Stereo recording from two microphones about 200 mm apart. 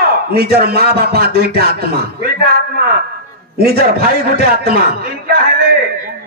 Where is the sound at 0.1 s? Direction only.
50° right (ahead or behind).